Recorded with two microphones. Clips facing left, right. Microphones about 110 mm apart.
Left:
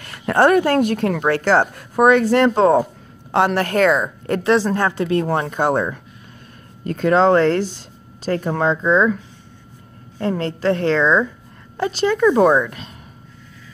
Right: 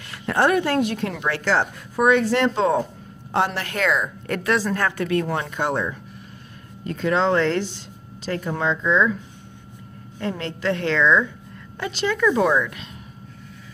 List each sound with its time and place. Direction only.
0.0 s speech: 50° left (ahead or behind)
3.3 s a woman's voice: 70° left (ahead or behind)
3.5 s a woman's voice: 45° left (ahead or behind); by 5.2 s 25° left (ahead or behind)
5.2 s a woman's voice: 35° left (ahead or behind)
10.1 s a woman's voice: 40° left (ahead or behind)